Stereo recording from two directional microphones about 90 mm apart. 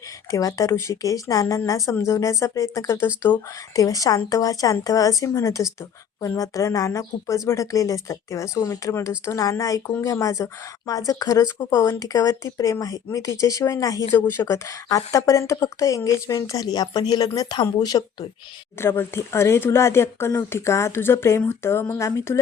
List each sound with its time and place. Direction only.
0.3 s speech: 40° left (ahead or behind)
14.1 s speech: 25° left (ahead or behind); by 18.3 s 50° left (ahead or behind)
18.8 s speech: 25° left (ahead or behind)